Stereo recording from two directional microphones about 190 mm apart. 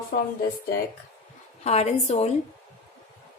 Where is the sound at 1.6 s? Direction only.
35° left (ahead or behind).